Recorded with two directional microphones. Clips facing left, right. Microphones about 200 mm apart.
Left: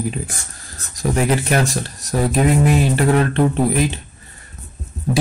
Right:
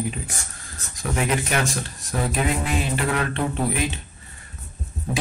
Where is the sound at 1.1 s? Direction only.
35° left (ahead or behind).